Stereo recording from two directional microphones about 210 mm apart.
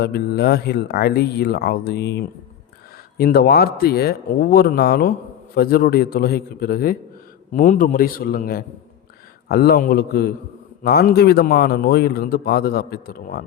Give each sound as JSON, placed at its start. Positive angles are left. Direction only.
{"t": 0.0, "sound": "a man's voice", "side_deg": 50}